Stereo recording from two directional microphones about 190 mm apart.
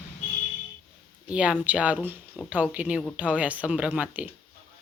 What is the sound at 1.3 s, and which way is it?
Speech, 5° right (ahead or behind).